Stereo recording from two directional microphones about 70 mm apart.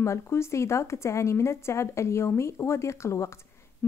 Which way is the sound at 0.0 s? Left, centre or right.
Left.